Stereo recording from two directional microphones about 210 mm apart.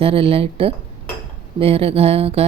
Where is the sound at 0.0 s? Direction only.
25° right (ahead or behind).